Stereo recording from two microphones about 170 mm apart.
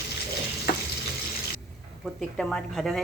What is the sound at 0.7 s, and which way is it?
Frying, 60° left (ahead or behind).